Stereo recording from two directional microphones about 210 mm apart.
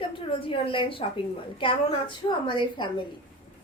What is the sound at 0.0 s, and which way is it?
A woman's voice, 25° left (ahead or behind).